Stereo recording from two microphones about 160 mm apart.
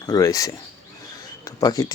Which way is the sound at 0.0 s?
20° left (ahead or behind).